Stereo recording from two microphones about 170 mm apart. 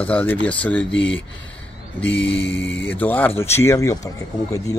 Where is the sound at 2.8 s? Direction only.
10° left (ahead or behind).